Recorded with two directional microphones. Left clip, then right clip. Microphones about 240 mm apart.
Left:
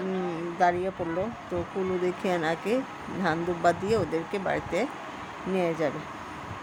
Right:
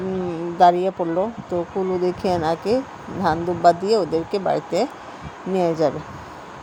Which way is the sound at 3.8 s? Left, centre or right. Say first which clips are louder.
Right 7 dB; centre.